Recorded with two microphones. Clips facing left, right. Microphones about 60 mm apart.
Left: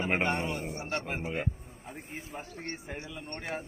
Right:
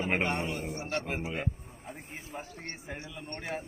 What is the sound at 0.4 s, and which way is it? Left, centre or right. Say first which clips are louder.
Speech: even; left.